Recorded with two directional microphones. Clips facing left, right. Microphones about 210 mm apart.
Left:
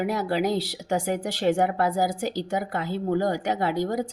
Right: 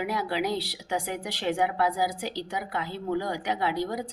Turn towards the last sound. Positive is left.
turn(degrees=45)  # may be behind; listen again after turning